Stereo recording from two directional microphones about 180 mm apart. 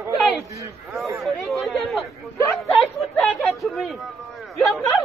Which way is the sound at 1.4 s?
Centre (ahead or behind).